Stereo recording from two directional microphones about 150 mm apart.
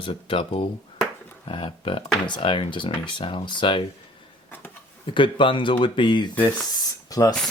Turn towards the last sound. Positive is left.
turn(degrees=25)  # may be behind; listen again after turning